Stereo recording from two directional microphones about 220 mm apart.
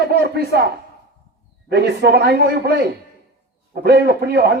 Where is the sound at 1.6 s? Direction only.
50° right (ahead or behind).